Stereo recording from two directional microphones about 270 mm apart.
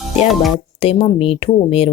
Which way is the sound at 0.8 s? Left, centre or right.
Centre.